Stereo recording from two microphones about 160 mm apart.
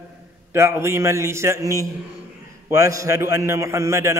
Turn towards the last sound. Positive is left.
turn(degrees=-15)  # may be behind; listen again after turning